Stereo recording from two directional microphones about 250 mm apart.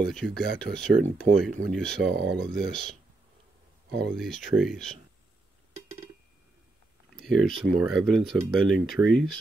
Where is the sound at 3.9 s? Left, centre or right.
Right.